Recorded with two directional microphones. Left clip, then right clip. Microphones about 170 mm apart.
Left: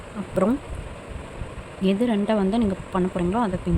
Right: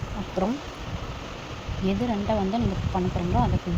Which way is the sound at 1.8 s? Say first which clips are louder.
Left 4 dB; 35° left (ahead or behind).